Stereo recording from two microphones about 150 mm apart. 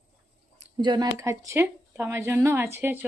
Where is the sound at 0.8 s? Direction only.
30° right (ahead or behind).